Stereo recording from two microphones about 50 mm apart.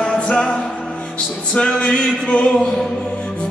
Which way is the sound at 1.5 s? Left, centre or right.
Left.